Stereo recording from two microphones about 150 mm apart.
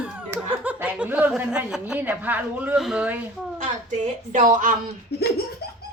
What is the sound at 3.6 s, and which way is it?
A woman's voice, 55° right (ahead or behind).